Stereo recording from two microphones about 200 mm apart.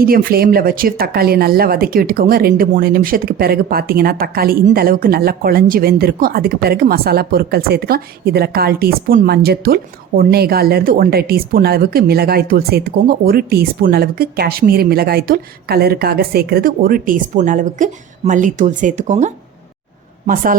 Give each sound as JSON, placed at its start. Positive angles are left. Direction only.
{"t": 0.0, "sound": "speech", "side_deg": -45}